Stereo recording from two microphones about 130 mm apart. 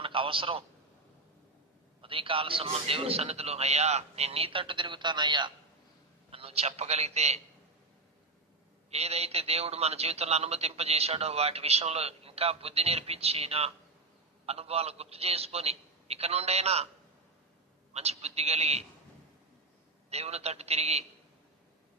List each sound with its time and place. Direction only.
0.0 s a sound: 45° right (ahead or behind)
2.0 s a man's voice: 45° right (ahead or behind)
6.3 s a man's voice: 50° right (ahead or behind)
8.9 s a man's voice: 55° right (ahead or behind)
17.9 s a man's voice: 55° right (ahead or behind)
20.1 s a man's voice: 55° right (ahead or behind)